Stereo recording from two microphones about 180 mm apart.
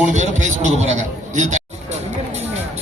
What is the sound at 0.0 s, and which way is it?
Speech, 40° right (ahead or behind).